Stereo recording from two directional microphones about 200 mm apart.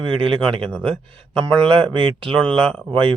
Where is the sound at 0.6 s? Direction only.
5° left (ahead or behind).